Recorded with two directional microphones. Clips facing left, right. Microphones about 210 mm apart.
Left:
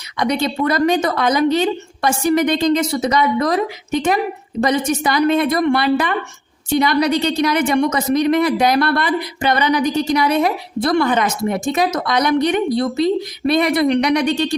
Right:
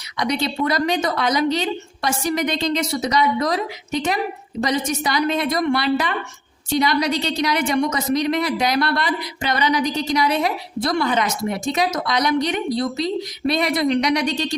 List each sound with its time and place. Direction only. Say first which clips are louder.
0.2 s a woman's voice: left 3 dB; 50° left (ahead or behind)
4.6 s a woman's voice: left 4 dB; 55° left (ahead or behind)